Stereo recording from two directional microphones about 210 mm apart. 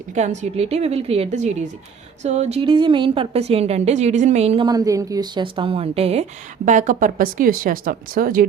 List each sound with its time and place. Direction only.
0.1 s a woman's voice: 35° right (ahead or behind)
4.6 s a woman's voice: 15° right (ahead or behind); by 8.4 s 40° right (ahead or behind)